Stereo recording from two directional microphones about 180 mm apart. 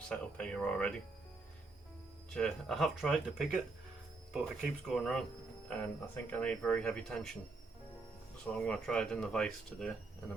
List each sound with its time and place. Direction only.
0.1 s speech: 5° left (ahead or behind)
2.3 s speech: 5° left (ahead or behind)
8.5 s speech: 5° left (ahead or behind)